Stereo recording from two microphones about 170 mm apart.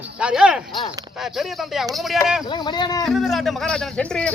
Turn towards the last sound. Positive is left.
turn(degrees=5)  # may be behind; listen again after turning